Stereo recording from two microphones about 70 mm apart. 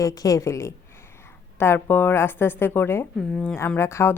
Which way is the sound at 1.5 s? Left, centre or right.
Left.